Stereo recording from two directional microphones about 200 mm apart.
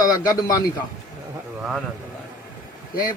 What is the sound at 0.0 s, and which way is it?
Speech, 20° left (ahead or behind).